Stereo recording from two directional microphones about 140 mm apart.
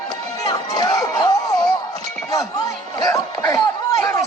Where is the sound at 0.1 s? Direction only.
30° left (ahead or behind).